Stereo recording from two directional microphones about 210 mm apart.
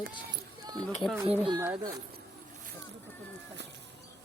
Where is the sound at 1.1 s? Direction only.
5° right (ahead or behind).